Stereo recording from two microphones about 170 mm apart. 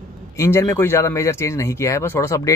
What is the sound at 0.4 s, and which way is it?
Speech, 15° left (ahead or behind).